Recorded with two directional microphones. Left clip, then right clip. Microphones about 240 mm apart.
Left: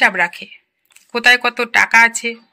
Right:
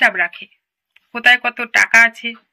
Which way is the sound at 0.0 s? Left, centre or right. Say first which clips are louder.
Left 1 dB; left.